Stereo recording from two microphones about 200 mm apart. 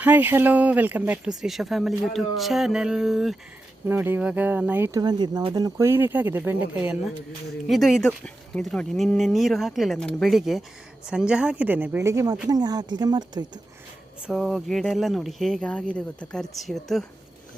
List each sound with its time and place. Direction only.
0.0 s a woman's voice: 10° right (ahead or behind)
14.3 s speech: centre (ahead or behind)